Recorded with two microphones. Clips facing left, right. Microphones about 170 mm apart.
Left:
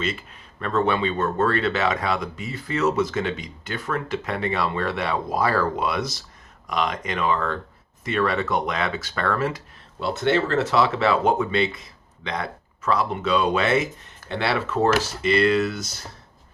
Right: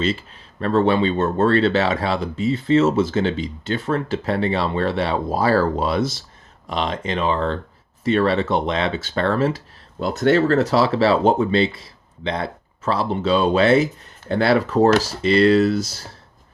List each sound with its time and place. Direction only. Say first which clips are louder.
0.0 s speech: right 6 dB; 30° right (ahead or behind)
10.0 s speech: right 5 dB; 40° right (ahead or behind)